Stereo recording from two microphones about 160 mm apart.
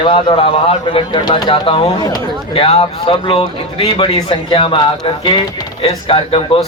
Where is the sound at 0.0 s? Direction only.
35° left (ahead or behind).